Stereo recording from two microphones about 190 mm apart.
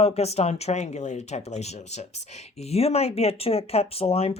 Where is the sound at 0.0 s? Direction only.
35° left (ahead or behind).